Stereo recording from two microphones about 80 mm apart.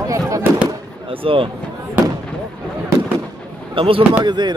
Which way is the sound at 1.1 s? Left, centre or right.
Right.